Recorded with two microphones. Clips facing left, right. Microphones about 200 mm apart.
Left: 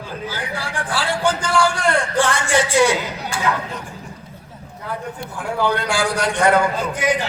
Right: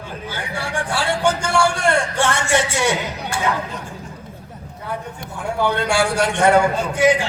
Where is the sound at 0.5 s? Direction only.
25° right (ahead or behind).